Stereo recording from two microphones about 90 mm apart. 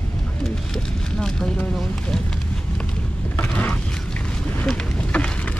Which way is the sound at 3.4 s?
15° left (ahead or behind).